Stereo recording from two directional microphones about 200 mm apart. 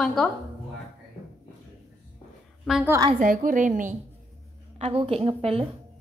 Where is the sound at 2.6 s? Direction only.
5° right (ahead or behind).